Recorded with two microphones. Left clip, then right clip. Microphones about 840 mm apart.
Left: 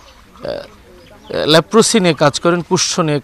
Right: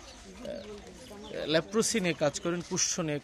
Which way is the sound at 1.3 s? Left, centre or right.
Left.